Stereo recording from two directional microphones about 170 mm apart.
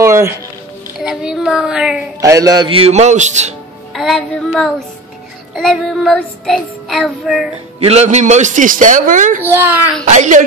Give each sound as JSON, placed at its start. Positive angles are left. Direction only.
{"t": 0.0, "sound": "music", "side_deg": -15}
{"t": 1.0, "sound": "speech", "side_deg": -5}
{"t": 2.1, "sound": "a man's voice", "side_deg": -20}
{"t": 3.9, "sound": "child singing", "side_deg": 0}
{"t": 7.8, "sound": "a man's voice", "side_deg": -40}
{"t": 9.4, "sound": "a child's voice", "side_deg": -10}
{"t": 10.0, "sound": "a man's voice", "side_deg": -45}